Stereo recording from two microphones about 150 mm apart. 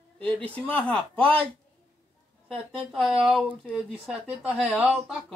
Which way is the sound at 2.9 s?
Centre (ahead or behind).